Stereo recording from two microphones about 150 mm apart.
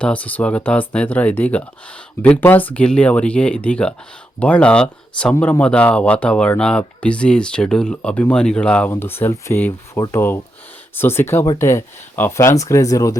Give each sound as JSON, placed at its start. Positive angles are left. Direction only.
{"t": 0.0, "sound": "speech", "side_deg": 10}